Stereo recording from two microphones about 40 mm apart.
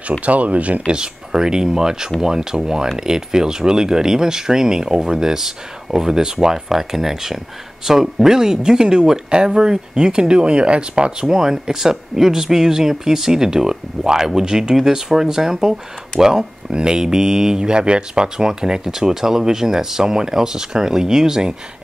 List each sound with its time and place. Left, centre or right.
0.2 s speech: right
0.9 s speech: centre